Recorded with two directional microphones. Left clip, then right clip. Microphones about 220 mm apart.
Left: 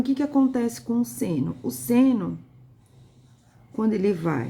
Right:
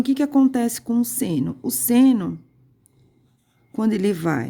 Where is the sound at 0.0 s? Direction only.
40° right (ahead or behind).